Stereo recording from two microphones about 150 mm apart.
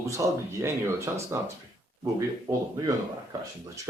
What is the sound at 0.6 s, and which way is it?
Speech, 15° right (ahead or behind).